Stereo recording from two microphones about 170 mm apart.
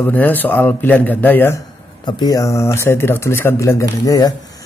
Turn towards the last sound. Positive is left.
turn(degrees=20)  # may be behind; listen again after turning